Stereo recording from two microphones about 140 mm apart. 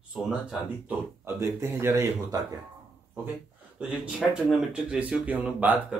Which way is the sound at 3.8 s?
5° right (ahead or behind).